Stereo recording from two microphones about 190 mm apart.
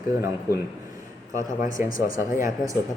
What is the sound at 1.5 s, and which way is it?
Speech, 45° left (ahead or behind).